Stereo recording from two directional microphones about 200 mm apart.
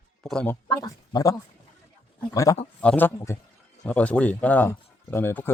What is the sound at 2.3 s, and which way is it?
Speech, 15° left (ahead or behind).